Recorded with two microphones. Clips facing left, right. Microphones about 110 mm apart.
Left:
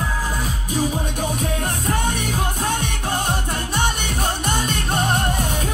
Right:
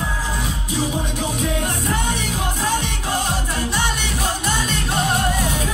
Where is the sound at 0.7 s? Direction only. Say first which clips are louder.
Left 1 dB; 45° left (ahead or behind).